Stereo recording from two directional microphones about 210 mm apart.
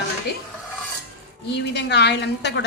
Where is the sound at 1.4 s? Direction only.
55° left (ahead or behind).